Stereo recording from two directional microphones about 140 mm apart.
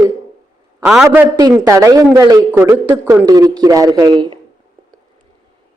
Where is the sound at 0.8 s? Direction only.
10° right (ahead or behind).